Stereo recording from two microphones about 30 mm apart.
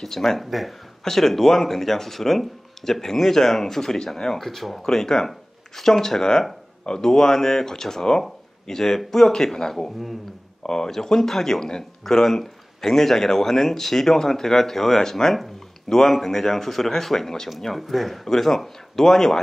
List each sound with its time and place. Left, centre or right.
0.0 s speech: centre
0.5 s speech: centre
18.3 s speech: centre